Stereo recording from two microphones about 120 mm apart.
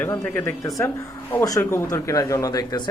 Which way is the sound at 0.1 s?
15° left (ahead or behind).